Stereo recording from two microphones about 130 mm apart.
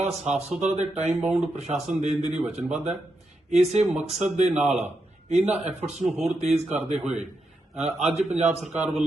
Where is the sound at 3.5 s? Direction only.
55° right (ahead or behind).